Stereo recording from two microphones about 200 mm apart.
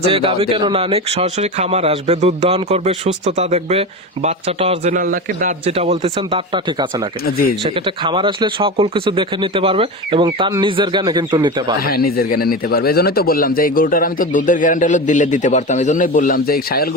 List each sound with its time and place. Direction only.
0.1 s a man's voice: 25° right (ahead or behind); by 5.5 s 45° right (ahead or behind)
5.6 s speech: 30° right (ahead or behind)
7.3 s a man's voice: 45° left (ahead or behind)
7.9 s speech: 25° right (ahead or behind)
11.9 s a man's voice: 50° left (ahead or behind)